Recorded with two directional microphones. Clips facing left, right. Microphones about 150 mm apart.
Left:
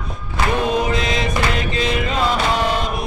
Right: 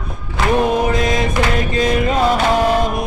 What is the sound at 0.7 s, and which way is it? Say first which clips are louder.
Chant: right 3 dB; 45° right (ahead or behind).